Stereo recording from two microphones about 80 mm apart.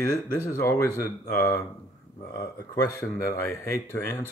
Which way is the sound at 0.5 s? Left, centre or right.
Left.